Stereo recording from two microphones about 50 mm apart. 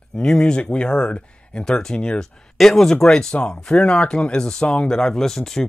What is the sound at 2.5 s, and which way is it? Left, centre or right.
Speech, centre.